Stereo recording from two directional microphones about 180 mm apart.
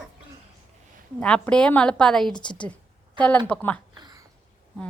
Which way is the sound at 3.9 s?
20° right (ahead or behind).